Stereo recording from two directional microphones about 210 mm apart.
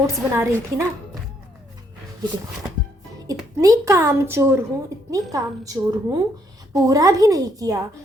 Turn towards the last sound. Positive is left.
turn(degrees=-15)  # may be behind; listen again after turning